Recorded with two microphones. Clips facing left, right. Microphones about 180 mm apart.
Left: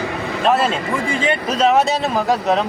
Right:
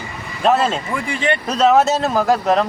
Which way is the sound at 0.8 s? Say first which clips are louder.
Left 2 dB; 85° left.